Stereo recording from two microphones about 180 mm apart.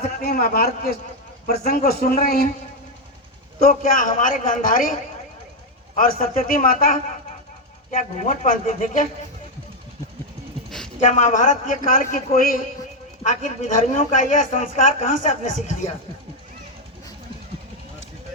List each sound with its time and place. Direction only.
0.2 s a man's voice: 55° left (ahead or behind)
3.7 s speech: 50° left (ahead or behind)
6.3 s speech: 50° left (ahead or behind)
10.7 s a sound: 5° left (ahead or behind)
11.0 s speech: 45° left (ahead or behind)